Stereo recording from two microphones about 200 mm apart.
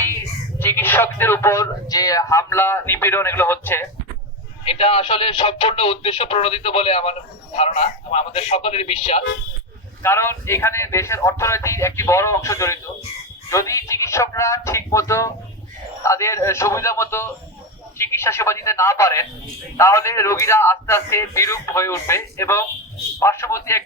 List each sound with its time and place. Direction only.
0.6 s a man's voice: 10° left (ahead or behind)
4.6 s speech: 30° left (ahead or behind)
10.0 s a man's voice: 10° left (ahead or behind)